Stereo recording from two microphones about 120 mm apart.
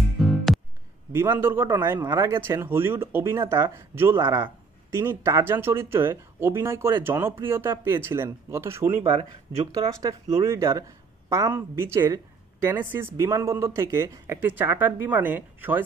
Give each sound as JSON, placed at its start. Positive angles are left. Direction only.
{"t": 0.2, "sound": "music", "side_deg": 0}
{"t": 1.1, "sound": "speech", "side_deg": -15}
{"t": 2.0, "sound": "speech", "side_deg": -35}
{"t": 2.4, "sound": "speech", "side_deg": -20}
{"t": 9.0, "sound": "speech", "side_deg": -50}
{"t": 9.8, "sound": "speech", "side_deg": -30}